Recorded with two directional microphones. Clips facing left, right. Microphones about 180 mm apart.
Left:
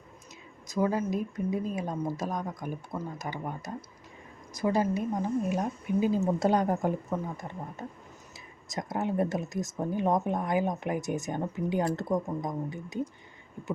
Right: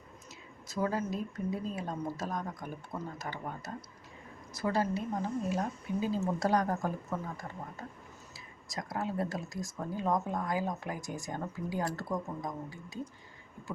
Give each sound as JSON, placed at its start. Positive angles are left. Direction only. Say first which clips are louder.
{"t": 0.7, "sound": "speech", "louder": "left 5 dB", "side_deg": 15}